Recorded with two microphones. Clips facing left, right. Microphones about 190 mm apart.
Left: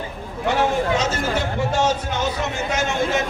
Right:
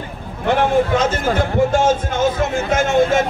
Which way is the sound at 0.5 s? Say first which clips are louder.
Right 4 dB; 55° right (ahead or behind).